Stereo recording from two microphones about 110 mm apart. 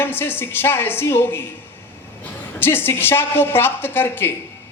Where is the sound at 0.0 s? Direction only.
20° left (ahead or behind).